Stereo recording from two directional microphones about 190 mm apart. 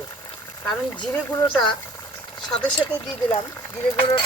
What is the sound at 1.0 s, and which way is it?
Speech, 5° left (ahead or behind).